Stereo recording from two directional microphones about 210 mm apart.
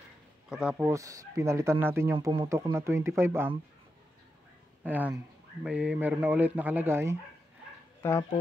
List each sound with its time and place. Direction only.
0.5 s speech: 5° right (ahead or behind)
2.1 s speech: 25° right (ahead or behind)
2.4 s speech: 15° right (ahead or behind)
4.8 s speech: 10° right (ahead or behind)
8.0 s speech: 15° left (ahead or behind)